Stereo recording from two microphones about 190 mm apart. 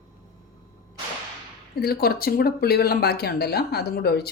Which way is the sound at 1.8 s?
55° left (ahead or behind).